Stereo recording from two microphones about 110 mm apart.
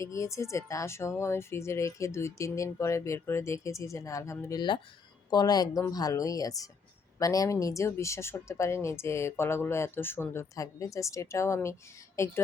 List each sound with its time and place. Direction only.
0.0 s speech: 30° left (ahead or behind)
5.3 s speech: 40° left (ahead or behind)